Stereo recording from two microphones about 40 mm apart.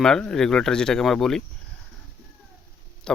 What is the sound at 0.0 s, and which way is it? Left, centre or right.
Speech, centre.